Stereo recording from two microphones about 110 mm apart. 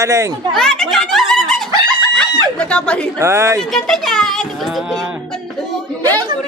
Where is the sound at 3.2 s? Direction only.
25° right (ahead or behind).